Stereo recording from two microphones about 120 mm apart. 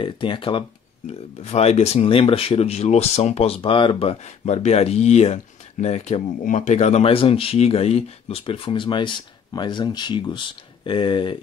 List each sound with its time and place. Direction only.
0.0 s speech: 45° left (ahead or behind)
1.0 s speech: 65° left (ahead or behind); by 11.3 s 45° left (ahead or behind)